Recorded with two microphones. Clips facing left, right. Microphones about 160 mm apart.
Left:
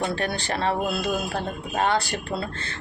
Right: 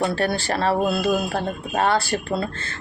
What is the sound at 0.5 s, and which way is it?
Speech, 35° right (ahead or behind).